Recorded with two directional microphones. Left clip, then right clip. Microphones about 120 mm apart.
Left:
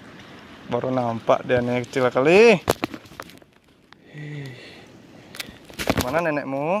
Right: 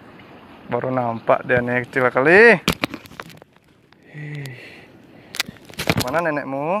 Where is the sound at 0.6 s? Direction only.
10° right (ahead or behind).